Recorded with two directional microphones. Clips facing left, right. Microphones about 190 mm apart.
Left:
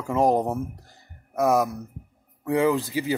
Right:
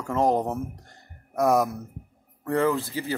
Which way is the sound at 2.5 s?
15° left (ahead or behind).